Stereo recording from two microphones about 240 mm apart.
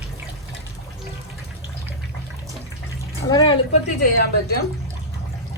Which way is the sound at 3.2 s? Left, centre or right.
Centre.